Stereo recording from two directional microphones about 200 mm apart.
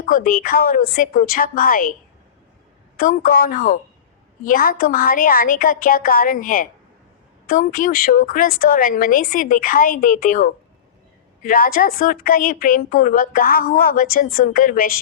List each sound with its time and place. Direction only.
0.0 s a woman's voice: 45° left (ahead or behind)
3.0 s a woman's voice: 45° left (ahead or behind)